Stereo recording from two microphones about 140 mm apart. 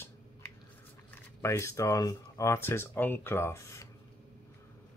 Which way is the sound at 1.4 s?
20° left (ahead or behind).